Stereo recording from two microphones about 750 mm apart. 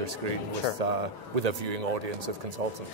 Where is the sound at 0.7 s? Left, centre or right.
Right.